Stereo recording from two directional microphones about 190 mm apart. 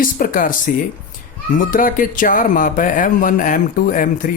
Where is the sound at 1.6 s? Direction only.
45° left (ahead or behind).